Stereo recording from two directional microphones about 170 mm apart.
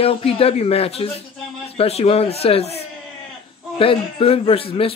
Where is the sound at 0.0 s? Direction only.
35° left (ahead or behind).